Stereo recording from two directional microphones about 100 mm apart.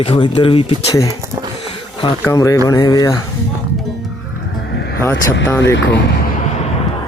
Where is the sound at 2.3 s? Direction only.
35° left (ahead or behind).